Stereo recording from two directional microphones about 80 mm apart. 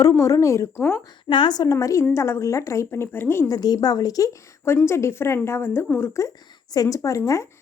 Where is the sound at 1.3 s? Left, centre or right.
Left.